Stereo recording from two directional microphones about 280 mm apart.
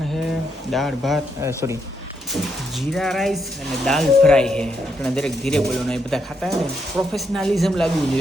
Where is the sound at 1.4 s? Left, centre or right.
Centre.